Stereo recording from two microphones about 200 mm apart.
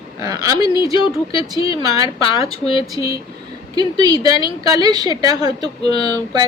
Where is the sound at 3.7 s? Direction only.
20° right (ahead or behind).